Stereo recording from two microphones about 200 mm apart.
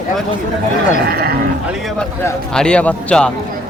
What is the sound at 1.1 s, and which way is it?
Speech, 50° right (ahead or behind).